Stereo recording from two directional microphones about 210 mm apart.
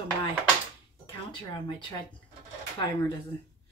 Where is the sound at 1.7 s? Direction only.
20° left (ahead or behind).